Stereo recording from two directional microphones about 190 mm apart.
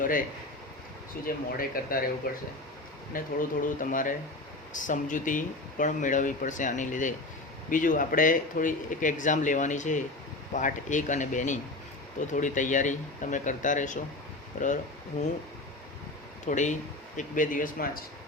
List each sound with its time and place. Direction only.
0.0 s speech: 45° left (ahead or behind)
16.5 s speech: 40° left (ahead or behind)